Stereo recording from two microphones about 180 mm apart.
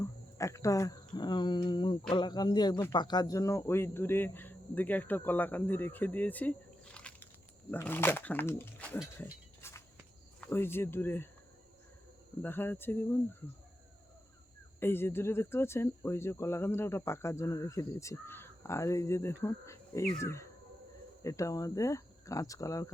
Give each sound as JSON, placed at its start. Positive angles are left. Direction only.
{"t": 0.0, "sound": "speech", "side_deg": 15}
{"t": 9.1, "sound": "a sound", "side_deg": 15}
{"t": 10.4, "sound": "speech", "side_deg": 10}
{"t": 12.4, "sound": "speech", "side_deg": 10}
{"t": 14.8, "sound": "speech", "side_deg": 10}